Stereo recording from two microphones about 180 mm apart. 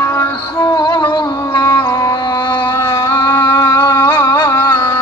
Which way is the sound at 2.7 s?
15° left (ahead or behind).